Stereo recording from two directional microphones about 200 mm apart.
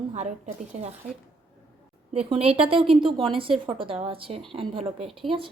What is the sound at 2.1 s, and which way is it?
A woman's voice, 30° right (ahead or behind).